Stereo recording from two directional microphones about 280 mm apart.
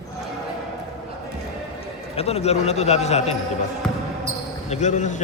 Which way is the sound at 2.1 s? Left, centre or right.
Left.